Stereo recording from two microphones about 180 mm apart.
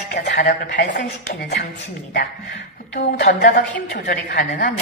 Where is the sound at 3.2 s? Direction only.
50° left (ahead or behind).